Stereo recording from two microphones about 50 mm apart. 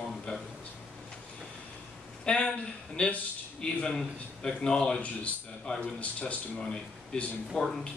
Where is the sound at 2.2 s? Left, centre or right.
Left.